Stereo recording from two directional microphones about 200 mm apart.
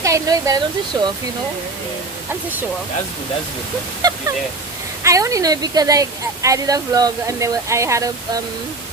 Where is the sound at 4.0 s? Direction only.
20° right (ahead or behind).